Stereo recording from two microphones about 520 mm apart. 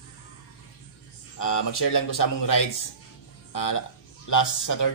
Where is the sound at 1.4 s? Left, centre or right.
Left.